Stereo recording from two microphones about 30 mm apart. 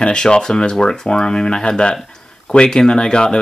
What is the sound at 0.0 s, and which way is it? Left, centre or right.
Speech, left.